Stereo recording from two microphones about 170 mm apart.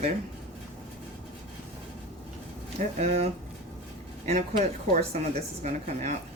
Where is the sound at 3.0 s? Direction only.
40° right (ahead or behind).